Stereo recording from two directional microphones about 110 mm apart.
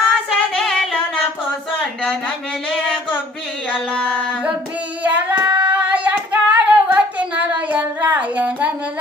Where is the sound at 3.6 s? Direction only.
10° left (ahead or behind).